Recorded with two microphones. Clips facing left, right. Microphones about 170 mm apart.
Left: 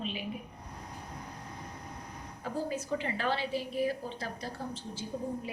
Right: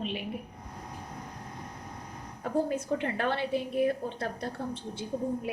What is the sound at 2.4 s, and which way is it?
A woman's voice, 55° right (ahead or behind).